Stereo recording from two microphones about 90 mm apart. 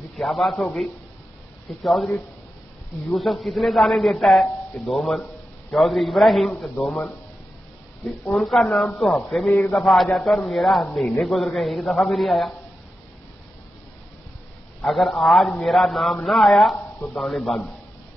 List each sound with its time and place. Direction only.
0.2 s a man's voice: centre (ahead or behind)
3.4 s a man's voice: centre (ahead or behind)
8.3 s a man's voice: 5° left (ahead or behind)
9.5 s a man's voice: 20° left (ahead or behind)
9.8 s a man's voice: centre (ahead or behind)
14.8 s a man's voice: centre (ahead or behind)
16.7 s speech: 20° left (ahead or behind)
17.2 s a man's voice: centre (ahead or behind)